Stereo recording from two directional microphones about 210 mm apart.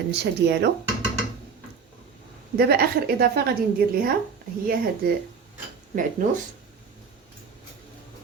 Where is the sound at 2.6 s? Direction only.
50° right (ahead or behind).